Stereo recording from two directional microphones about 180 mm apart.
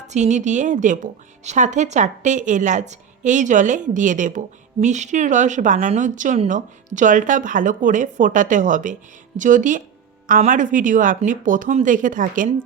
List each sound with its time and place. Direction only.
0.1 s a woman's voice: 40° right (ahead or behind)